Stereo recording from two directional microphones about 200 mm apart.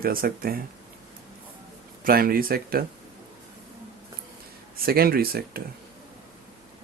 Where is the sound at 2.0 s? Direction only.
45° right (ahead or behind).